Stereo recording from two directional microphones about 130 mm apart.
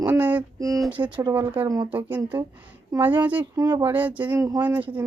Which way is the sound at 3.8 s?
10° right (ahead or behind).